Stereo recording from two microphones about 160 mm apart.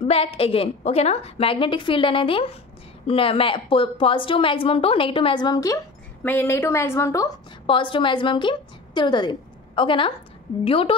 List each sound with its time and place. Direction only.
0.1 s a woman's voice: 35° left (ahead or behind)
6.2 s a woman's voice: 10° left (ahead or behind)
7.6 s a woman's voice: 30° left (ahead or behind)